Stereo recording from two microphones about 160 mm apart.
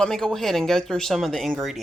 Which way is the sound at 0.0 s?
5° left (ahead or behind).